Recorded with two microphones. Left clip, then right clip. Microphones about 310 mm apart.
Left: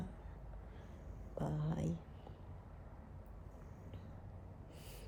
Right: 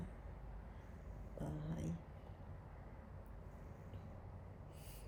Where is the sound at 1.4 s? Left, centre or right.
Left.